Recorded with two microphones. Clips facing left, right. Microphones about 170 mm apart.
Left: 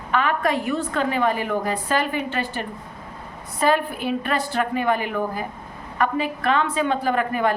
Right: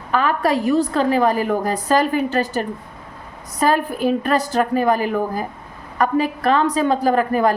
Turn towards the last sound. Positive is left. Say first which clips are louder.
# right 5 dB
turn(degrees=-40)  # may be behind; listen again after turning